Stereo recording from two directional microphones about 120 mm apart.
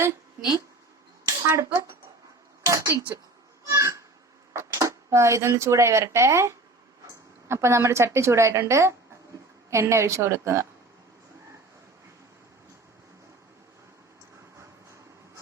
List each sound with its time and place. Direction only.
1.2 s speech: 25° right (ahead or behind)
3.7 s a sound: 25° right (ahead or behind)
4.5 s speech: 25° right (ahead or behind)